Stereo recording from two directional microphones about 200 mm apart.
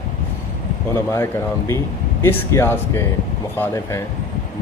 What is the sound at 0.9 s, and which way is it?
Speech, 15° left (ahead or behind).